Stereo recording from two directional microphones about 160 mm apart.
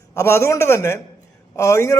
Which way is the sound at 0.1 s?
15° left (ahead or behind).